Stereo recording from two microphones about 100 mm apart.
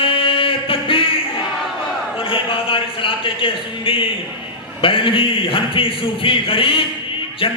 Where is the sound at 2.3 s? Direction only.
60° left (ahead or behind).